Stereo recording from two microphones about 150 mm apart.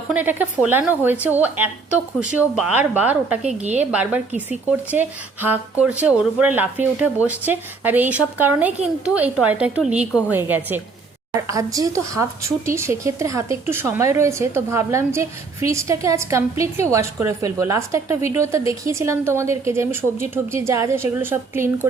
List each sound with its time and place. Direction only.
0.1 s speech: 10° right (ahead or behind)